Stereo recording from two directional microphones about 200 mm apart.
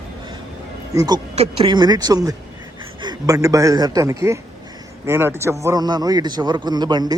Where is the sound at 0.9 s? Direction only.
20° right (ahead or behind).